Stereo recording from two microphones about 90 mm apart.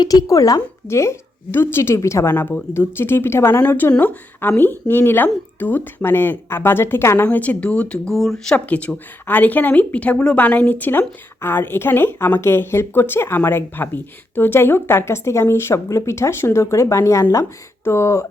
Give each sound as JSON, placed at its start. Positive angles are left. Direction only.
{"t": 0.0, "sound": "speech", "side_deg": 45}